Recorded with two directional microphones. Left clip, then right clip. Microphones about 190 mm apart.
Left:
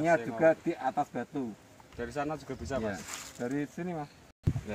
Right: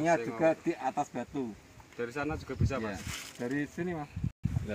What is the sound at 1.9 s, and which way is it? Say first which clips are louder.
Speech: even; 50° left (ahead or behind).